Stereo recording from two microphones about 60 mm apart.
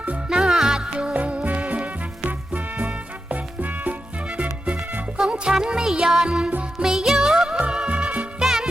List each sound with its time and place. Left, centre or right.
0.3 s music: centre
8.4 s music: centre